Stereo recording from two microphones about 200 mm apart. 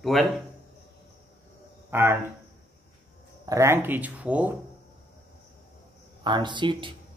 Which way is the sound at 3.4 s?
15° right (ahead or behind).